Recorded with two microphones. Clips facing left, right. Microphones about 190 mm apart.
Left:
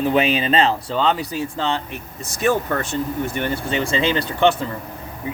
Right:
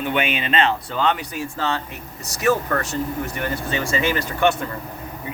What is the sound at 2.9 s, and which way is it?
Speech, 25° left (ahead or behind).